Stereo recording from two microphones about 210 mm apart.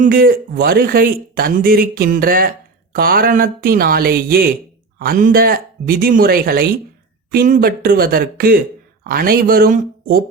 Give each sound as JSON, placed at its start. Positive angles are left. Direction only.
{"t": 0.0, "sound": "speech", "side_deg": -45}